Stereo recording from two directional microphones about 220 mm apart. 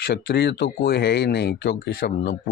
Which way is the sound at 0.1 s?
50° left (ahead or behind).